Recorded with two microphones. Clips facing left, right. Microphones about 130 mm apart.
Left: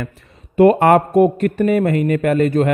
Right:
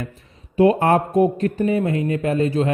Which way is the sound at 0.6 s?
70° left (ahead or behind).